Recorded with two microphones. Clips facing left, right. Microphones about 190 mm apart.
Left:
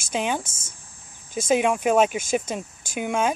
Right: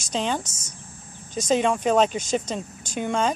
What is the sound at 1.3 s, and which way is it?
Speech, 10° left (ahead or behind).